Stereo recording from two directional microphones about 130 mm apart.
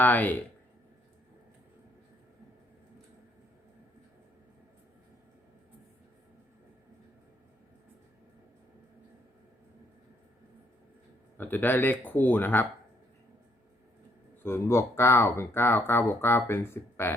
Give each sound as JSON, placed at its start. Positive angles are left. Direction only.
{"t": 0.0, "sound": "speech", "side_deg": 15}
{"t": 11.3, "sound": "speech", "side_deg": 15}
{"t": 14.4, "sound": "speech", "side_deg": 20}